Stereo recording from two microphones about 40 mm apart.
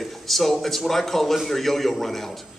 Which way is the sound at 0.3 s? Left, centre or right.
Centre.